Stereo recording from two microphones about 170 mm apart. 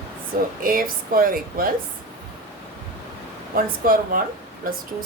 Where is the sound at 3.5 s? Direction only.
55° right (ahead or behind).